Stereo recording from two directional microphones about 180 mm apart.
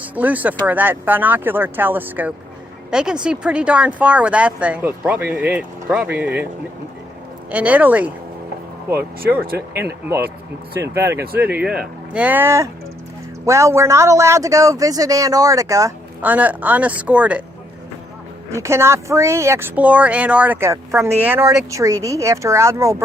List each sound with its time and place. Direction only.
0.0 s speech: 10° right (ahead or behind)
7.5 s speech: 10° right (ahead or behind)
18.5 s speech: 15° right (ahead or behind)